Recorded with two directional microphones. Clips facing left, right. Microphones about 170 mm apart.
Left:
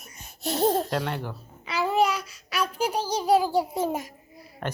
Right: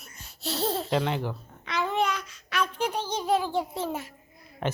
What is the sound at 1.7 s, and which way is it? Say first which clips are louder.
A child's voice: left 4 dB; 10° left (ahead or behind).